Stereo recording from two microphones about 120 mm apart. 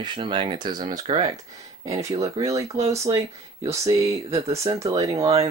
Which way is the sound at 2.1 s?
30° right (ahead or behind).